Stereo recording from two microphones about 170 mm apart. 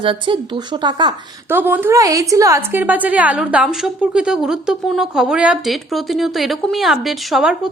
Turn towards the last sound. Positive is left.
turn(degrees=-5)  # may be behind; listen again after turning